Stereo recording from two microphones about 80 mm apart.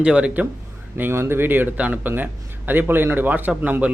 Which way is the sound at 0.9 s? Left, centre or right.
Right.